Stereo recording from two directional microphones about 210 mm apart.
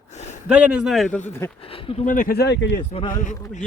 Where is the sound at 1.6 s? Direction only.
25° left (ahead or behind); by 2.8 s 55° left (ahead or behind).